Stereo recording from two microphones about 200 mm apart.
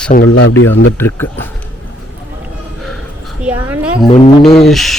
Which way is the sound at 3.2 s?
5° right (ahead or behind).